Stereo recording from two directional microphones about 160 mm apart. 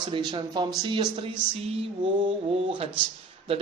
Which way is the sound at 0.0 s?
30° right (ahead or behind).